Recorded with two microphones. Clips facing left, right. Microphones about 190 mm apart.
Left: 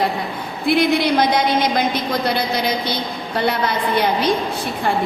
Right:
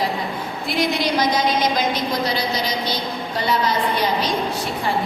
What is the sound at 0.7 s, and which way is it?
A woman's voice, 60° left (ahead or behind).